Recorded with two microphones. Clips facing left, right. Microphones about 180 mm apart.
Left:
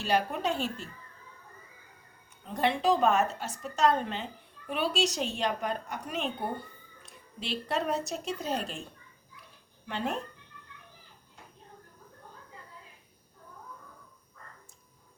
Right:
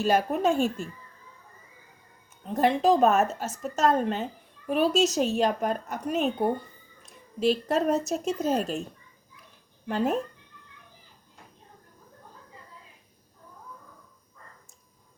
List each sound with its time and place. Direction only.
0.0 s a woman's voice: 45° right (ahead or behind)
2.5 s a woman's voice: 40° right (ahead or behind)
9.8 s speech: 40° right (ahead or behind)